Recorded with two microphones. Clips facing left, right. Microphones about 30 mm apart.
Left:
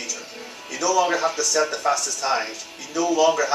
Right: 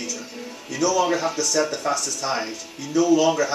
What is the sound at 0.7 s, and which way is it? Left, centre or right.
Speech, centre.